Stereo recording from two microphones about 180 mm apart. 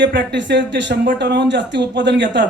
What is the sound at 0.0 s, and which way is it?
A man's voice, 75° right (ahead or behind).